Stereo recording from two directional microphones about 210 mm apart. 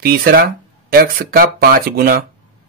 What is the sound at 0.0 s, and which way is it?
Speech, 45° right (ahead or behind).